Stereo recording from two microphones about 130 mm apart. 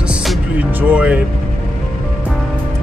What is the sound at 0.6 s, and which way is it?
Speech, 15° right (ahead or behind).